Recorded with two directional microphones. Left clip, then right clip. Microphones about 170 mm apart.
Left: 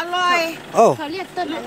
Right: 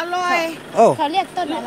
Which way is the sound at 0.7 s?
15° left (ahead or behind).